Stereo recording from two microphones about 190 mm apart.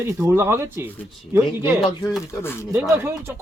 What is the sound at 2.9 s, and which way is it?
Speech, 15° right (ahead or behind).